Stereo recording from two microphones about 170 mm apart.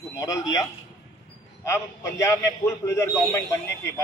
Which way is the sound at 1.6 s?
15° left (ahead or behind).